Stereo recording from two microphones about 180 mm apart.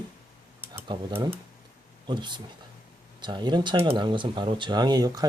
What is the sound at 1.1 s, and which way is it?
Speech, 10° right (ahead or behind).